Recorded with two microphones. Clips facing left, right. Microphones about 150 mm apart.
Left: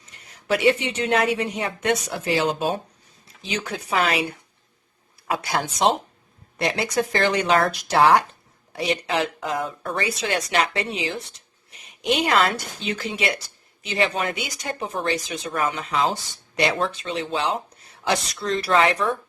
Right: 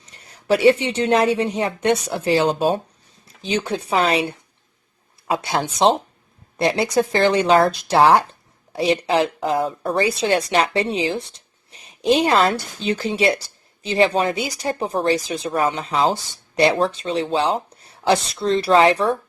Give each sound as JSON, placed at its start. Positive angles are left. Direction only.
{"t": 0.0, "sound": "speech", "side_deg": -35}